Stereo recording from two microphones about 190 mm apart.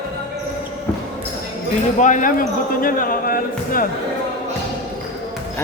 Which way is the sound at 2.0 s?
45° left (ahead or behind).